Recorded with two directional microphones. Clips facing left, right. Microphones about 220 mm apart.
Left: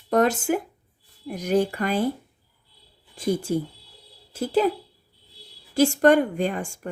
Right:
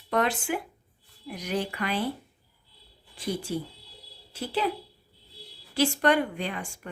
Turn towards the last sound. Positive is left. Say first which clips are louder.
# left 8 dB
turn(degrees=45)  # may be behind; listen again after turning